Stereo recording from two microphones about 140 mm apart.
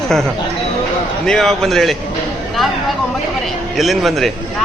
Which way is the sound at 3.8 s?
Centre (ahead or behind).